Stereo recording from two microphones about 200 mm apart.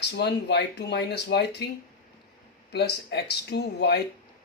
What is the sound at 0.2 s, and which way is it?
Speech, 55° left (ahead or behind).